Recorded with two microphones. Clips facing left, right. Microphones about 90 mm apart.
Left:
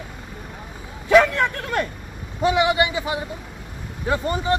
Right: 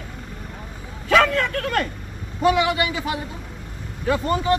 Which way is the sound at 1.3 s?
15° left (ahead or behind).